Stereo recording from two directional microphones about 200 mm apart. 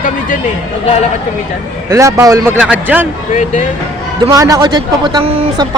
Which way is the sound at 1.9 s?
15° right (ahead or behind).